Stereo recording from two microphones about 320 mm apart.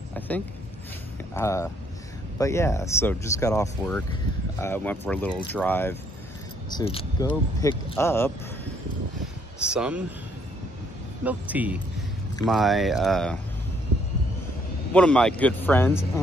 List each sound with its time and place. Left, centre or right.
1.3 s speech: centre
9.7 s speech: centre
11.2 s speech: centre
14.9 s speech: centre